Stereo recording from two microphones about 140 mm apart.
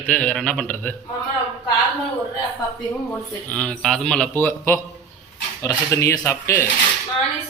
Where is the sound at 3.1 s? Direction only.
10° left (ahead or behind).